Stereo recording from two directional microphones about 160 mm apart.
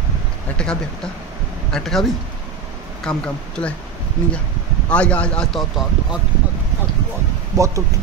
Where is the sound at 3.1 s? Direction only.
5° left (ahead or behind).